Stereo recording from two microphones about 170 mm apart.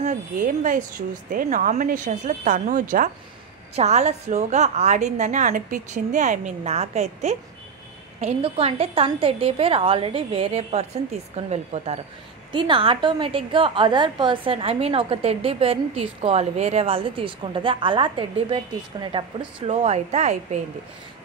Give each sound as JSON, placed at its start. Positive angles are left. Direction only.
{"t": 0.0, "sound": "a woman's voice", "side_deg": -45}
{"t": 3.7, "sound": "a woman's voice", "side_deg": -40}